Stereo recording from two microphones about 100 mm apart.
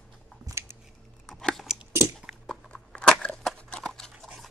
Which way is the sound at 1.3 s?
5° left (ahead or behind).